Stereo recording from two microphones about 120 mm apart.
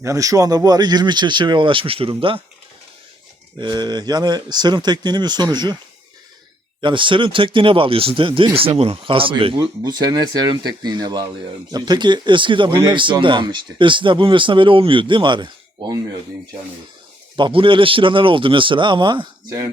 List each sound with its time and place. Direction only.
0.0 s speech: 25° right (ahead or behind); by 2.4 s 45° right (ahead or behind)
3.6 s speech: 35° right (ahead or behind)
6.8 s speech: 45° right (ahead or behind)
9.8 s speech: 35° right (ahead or behind)
17.3 s speech: 45° right (ahead or behind)
19.5 s speech: 25° right (ahead or behind)